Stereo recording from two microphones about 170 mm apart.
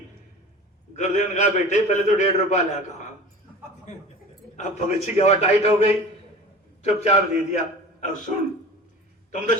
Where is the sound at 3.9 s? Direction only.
45° left (ahead or behind).